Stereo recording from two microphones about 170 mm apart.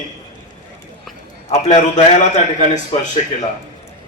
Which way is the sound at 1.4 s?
40° left (ahead or behind).